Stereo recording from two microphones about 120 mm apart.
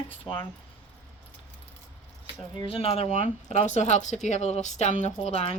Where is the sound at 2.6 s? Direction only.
55° left (ahead or behind).